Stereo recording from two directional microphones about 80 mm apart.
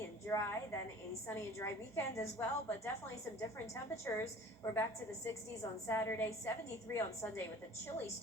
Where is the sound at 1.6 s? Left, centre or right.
Left.